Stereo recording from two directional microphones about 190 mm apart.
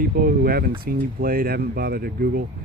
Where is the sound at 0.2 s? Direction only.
50° right (ahead or behind).